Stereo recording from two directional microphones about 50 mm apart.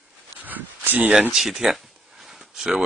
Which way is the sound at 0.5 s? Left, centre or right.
Right.